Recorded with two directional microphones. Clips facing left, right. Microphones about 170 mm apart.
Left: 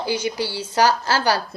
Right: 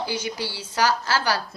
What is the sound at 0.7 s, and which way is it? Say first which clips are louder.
Speech: left 4 dB; 30° left (ahead or behind).